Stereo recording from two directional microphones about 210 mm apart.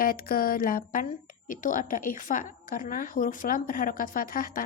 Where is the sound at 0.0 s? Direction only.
45° left (ahead or behind).